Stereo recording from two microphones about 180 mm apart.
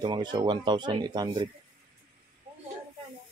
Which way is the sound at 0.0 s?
25° right (ahead or behind).